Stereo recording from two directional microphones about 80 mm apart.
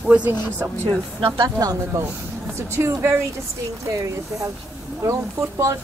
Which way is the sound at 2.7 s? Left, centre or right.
Right.